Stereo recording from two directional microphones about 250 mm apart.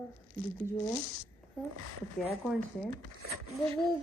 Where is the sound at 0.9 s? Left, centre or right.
Right.